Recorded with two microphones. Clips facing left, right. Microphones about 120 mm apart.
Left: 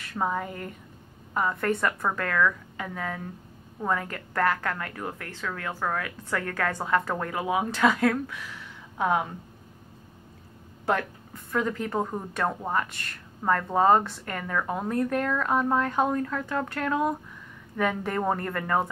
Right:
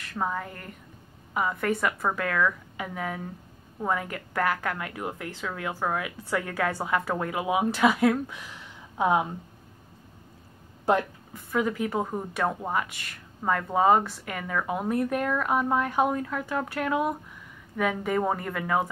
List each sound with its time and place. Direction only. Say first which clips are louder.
0.0 s a woman's voice: left 2 dB; 5° left (ahead or behind); by 9.3 s 15° right (ahead or behind)
11.3 s a woman's voice: right 1 dB; 10° right (ahead or behind)